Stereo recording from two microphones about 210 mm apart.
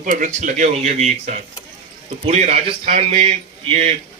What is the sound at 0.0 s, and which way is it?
A man's voice, 35° right (ahead or behind).